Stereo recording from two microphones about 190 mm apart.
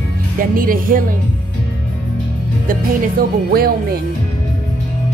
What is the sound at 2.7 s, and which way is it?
Speech, 50° right (ahead or behind).